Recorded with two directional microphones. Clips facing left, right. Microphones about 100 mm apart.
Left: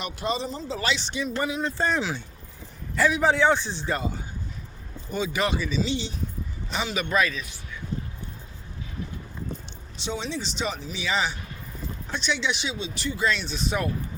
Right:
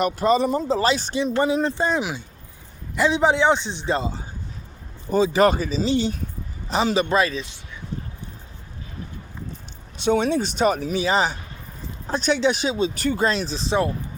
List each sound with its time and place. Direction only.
0.0 s speech: 45° right (ahead or behind)
0.7 s speech: 40° right (ahead or behind)
1.2 s speech: 30° right (ahead or behind)
1.8 s a man's voice: 15° right (ahead or behind)
5.1 s speech: 35° right (ahead or behind)
10.0 s speech: 55° right (ahead or behind)
11.0 s speech: 40° right (ahead or behind)